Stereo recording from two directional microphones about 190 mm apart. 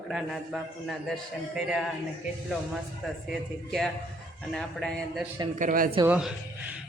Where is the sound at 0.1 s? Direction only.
Centre (ahead or behind).